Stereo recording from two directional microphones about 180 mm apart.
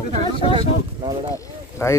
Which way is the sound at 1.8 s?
15° left (ahead or behind).